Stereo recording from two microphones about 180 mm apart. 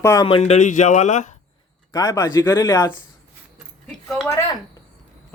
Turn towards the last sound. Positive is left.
turn(degrees=0)  # may be behind; listen again after turning